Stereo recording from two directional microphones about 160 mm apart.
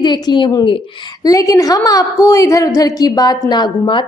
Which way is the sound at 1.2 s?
20° left (ahead or behind).